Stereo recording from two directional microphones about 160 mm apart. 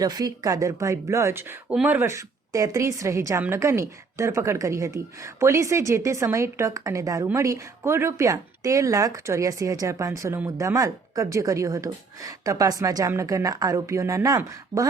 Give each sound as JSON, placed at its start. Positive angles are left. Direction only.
{"t": 0.0, "sound": "a woman's voice", "side_deg": -25}